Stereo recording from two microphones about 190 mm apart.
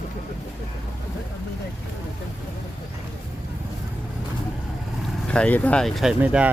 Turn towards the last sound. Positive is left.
turn(degrees=-5)  # may be behind; listen again after turning